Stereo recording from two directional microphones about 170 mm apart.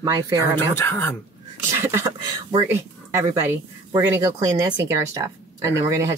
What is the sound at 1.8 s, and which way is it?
Speech, 15° right (ahead or behind).